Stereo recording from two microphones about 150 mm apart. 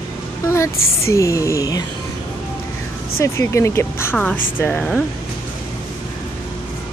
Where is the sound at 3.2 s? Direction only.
20° left (ahead or behind).